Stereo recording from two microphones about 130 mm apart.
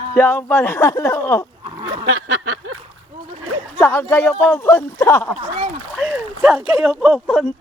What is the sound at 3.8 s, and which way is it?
Speech, 15° left (ahead or behind).